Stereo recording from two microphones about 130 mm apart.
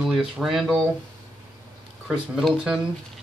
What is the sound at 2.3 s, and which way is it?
Speech, 5° right (ahead or behind).